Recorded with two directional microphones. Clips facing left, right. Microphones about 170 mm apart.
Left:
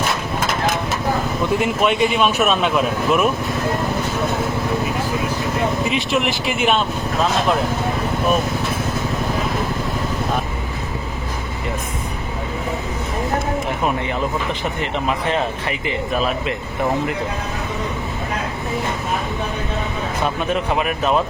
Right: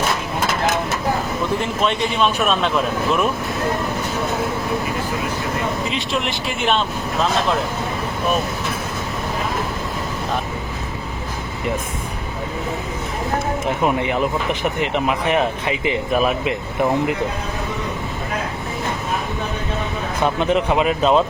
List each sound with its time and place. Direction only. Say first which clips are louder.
1.6 s speech: left 3 dB; 10° left (ahead or behind)
6.6 s speech: even; 5° left (ahead or behind)
13.7 s speech: right 2 dB; 20° right (ahead or behind)
20.2 s speech: right 4 dB; 20° right (ahead or behind)